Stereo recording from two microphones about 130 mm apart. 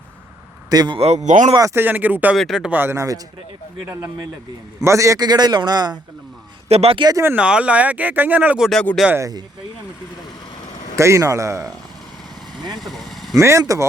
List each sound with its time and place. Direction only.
0.7 s a man's voice: 30° right (ahead or behind)
0.9 s speech: 55° right (ahead or behind)
1.5 s speech: 20° right (ahead or behind)
2.3 s speech: centre (ahead or behind); by 3.2 s 20° right (ahead or behind)
4.8 s a man's voice: 25° right (ahead or behind)
6.7 s speech: 50° right (ahead or behind)
7.3 s speech: 10° right (ahead or behind)
9.0 s a man's voice: 20° right (ahead or behind)
10.9 s a man's voice: 20° right (ahead or behind)
12.7 s vehicle: centre (ahead or behind)
13.3 s a man's voice: 25° right (ahead or behind)